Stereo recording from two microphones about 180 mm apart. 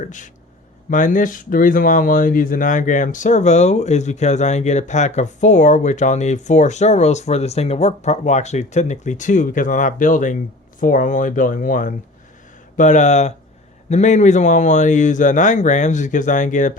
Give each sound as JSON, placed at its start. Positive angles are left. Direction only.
{"t": 0.0, "sound": "speech", "side_deg": 45}